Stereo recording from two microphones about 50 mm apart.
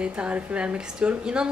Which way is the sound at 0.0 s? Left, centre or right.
Right.